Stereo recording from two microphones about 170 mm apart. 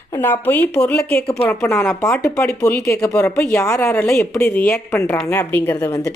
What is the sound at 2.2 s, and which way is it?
Speech, 15° left (ahead or behind).